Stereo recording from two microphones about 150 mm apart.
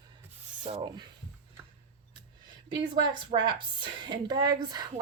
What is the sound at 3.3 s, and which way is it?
A woman's voice, 30° right (ahead or behind).